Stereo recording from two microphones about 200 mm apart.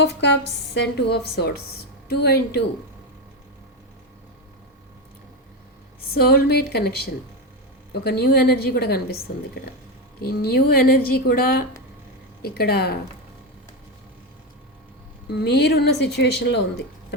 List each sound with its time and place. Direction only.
0.0 s a woman's voice: 60° left (ahead or behind)
6.0 s a woman's voice: 50° left (ahead or behind)
15.3 s speech: 55° left (ahead or behind)